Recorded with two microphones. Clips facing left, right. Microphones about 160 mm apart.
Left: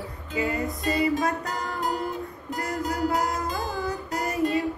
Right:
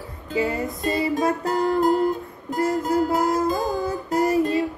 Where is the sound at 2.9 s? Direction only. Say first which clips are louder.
Right 3 dB; 25° right (ahead or behind).